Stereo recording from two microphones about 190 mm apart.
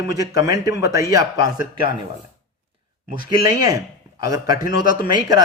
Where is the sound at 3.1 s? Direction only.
20° right (ahead or behind).